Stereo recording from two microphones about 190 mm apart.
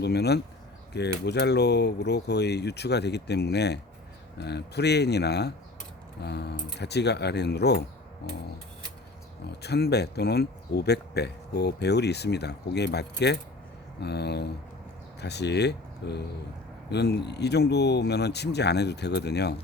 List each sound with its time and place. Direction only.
0.0 s speech: 60° left (ahead or behind)
9.5 s speech: 60° left (ahead or behind)